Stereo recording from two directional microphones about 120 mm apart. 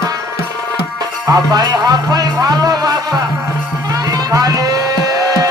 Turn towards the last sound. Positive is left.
turn(degrees=-30)  # may be behind; listen again after turning